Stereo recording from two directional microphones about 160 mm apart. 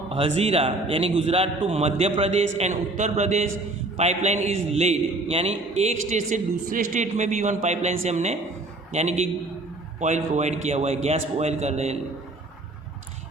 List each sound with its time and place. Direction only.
0.1 s a man's voice: 40° right (ahead or behind)